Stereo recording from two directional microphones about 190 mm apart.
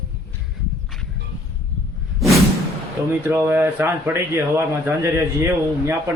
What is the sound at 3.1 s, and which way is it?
Speech, 10° right (ahead or behind).